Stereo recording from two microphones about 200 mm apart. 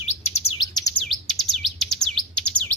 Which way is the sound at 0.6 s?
20° left (ahead or behind).